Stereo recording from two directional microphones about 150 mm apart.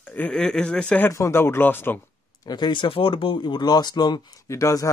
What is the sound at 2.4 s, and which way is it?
Speech, 30° left (ahead or behind).